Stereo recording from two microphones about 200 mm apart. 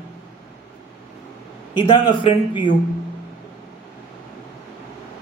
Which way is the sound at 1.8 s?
25° left (ahead or behind).